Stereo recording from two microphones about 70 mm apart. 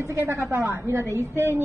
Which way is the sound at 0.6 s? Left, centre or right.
Right.